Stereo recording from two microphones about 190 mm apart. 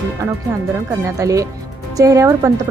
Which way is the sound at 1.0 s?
15° right (ahead or behind).